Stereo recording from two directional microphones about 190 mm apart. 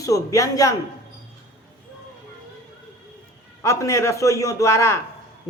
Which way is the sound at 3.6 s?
15° left (ahead or behind).